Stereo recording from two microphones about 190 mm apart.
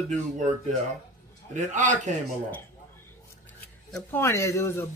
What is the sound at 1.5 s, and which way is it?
Speech, 40° right (ahead or behind).